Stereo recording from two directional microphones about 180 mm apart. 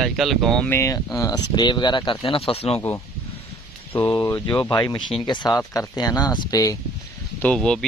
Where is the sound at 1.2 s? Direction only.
20° left (ahead or behind).